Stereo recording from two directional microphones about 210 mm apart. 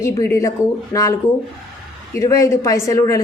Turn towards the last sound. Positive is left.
turn(degrees=15)  # may be behind; listen again after turning